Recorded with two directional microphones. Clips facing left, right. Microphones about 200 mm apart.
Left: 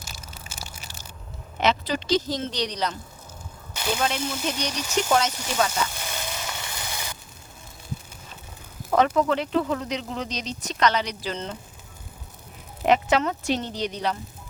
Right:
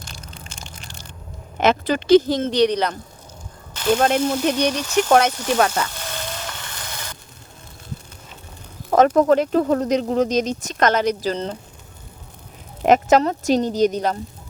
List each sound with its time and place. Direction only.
0.0 s crushing: 5° left (ahead or behind)
1.5 s speech: 50° right (ahead or behind)
6.0 s a sound: 10° left (ahead or behind)
8.9 s speech: 45° right (ahead or behind)
12.8 s speech: 45° right (ahead or behind)